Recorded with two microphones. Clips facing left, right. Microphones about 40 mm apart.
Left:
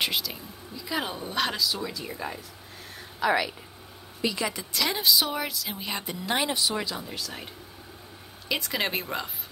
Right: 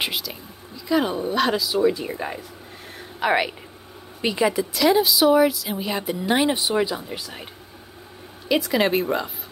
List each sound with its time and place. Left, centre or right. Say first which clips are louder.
0.0 s speech: right 1 dB; centre
1.8 s speech: right 12 dB; right
3.2 s a woman's voice: right 4 dB; right
4.6 s speech: right 11 dB; centre
8.5 s speech: right 9 dB; centre